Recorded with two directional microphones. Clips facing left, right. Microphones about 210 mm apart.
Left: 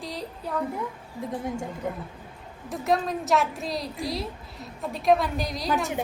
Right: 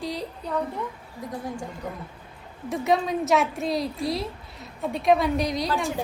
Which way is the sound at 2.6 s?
Centre (ahead or behind).